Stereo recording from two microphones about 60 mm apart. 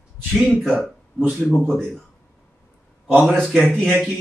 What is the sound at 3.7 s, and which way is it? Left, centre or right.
Speech, centre.